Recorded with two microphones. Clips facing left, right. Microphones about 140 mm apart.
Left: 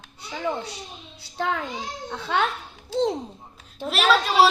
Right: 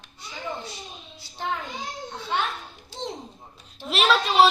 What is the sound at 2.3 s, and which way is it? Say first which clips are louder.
Speech: left 4 dB; 90° left.